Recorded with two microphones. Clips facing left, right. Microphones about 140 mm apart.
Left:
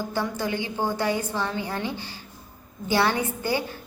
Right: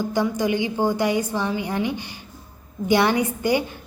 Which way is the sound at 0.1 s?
15° right (ahead or behind).